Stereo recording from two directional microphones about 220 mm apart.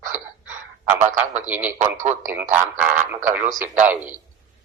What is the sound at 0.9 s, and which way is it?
Speech, 35° right (ahead or behind).